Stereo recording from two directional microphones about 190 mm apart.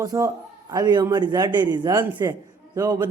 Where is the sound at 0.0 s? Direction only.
20° right (ahead or behind).